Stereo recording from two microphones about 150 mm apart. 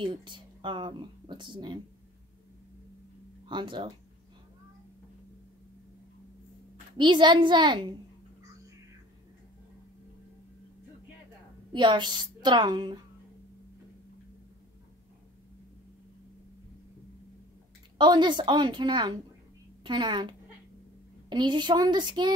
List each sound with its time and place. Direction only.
0.0 s speech: 30° right (ahead or behind)
3.4 s speech: 30° right (ahead or behind)
7.0 s speech: 30° right (ahead or behind)
11.7 s speech: 30° right (ahead or behind)
17.9 s speech: 30° right (ahead or behind)